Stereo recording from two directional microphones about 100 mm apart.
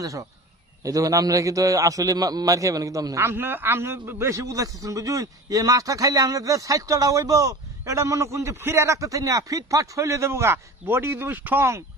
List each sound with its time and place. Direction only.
0.0 s a man's voice: 35° right (ahead or behind)
3.3 s a man's voice: 20° right (ahead or behind)